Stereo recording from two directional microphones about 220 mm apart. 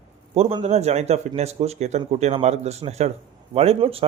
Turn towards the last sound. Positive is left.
turn(degrees=-25)  # may be behind; listen again after turning